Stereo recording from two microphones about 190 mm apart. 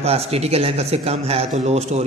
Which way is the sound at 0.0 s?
30° right (ahead or behind).